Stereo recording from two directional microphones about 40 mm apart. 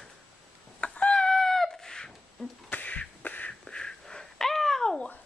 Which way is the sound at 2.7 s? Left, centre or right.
Left.